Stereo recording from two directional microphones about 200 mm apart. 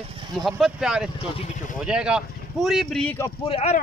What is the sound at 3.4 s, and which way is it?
Speech, 30° left (ahead or behind).